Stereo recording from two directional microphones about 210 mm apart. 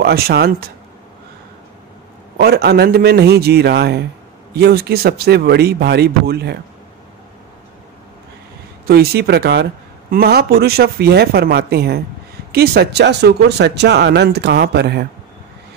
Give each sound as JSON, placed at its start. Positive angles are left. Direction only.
{"t": 0.0, "sound": "speech", "side_deg": -50}
{"t": 2.3, "sound": "speech", "side_deg": -50}
{"t": 8.8, "sound": "speech", "side_deg": -50}